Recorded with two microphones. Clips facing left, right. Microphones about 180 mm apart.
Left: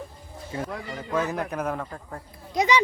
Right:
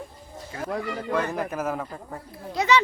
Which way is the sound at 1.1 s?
Centre (ahead or behind).